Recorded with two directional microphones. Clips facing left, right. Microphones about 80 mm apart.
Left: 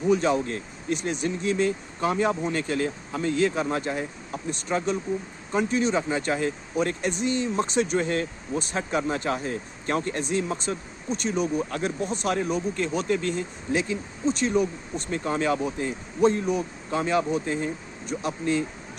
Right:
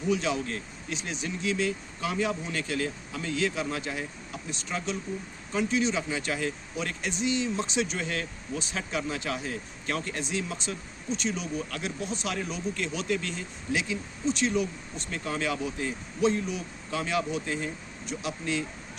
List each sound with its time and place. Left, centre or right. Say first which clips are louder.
0.1 s speech: left 5 dB; left
11.7 s speech: left 6 dB; left
18.0 s speech: left 5 dB; left